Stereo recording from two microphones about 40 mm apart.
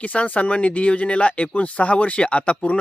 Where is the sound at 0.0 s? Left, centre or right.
Left.